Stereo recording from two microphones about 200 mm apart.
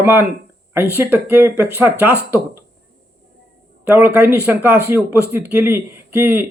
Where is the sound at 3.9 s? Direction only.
10° right (ahead or behind).